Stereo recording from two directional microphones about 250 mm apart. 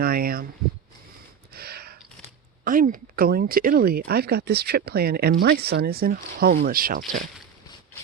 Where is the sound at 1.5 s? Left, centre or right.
Right.